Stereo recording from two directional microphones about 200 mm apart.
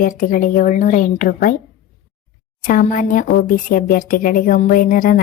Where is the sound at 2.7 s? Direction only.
40° left (ahead or behind).